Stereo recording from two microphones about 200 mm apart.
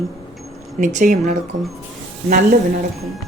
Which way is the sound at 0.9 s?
40° right (ahead or behind).